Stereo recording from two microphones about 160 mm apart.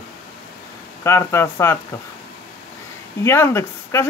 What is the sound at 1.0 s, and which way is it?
Speech, 15° left (ahead or behind).